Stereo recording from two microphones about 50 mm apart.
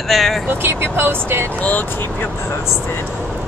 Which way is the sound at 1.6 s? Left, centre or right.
Left.